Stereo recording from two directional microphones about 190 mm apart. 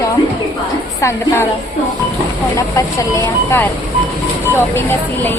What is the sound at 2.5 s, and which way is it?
Speech, 15° left (ahead or behind).